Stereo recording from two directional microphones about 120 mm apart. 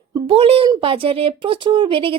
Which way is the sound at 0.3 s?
55° right (ahead or behind).